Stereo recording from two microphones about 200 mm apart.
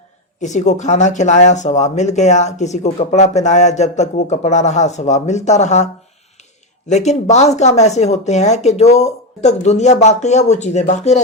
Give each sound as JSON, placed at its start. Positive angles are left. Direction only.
{"t": 0.4, "sound": "speech", "side_deg": 35}